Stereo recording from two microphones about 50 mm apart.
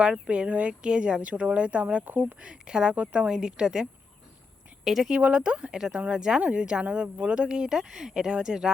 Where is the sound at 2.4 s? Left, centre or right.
Centre.